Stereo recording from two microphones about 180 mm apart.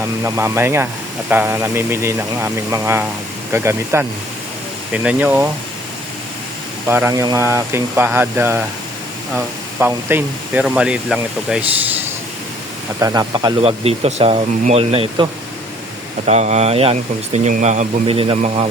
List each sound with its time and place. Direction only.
0.2 s speech: 15° right (ahead or behind)
6.8 s speech: 10° right (ahead or behind)
9.8 s speech: 10° right (ahead or behind)
13.0 s speech: 20° right (ahead or behind)